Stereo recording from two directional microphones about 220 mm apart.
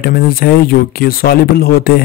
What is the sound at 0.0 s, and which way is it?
Speech, 45° left (ahead or behind).